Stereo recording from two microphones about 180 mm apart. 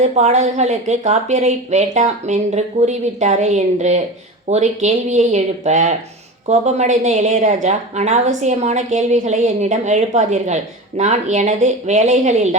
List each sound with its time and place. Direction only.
0.0 s a woman's voice: 40° right (ahead or behind)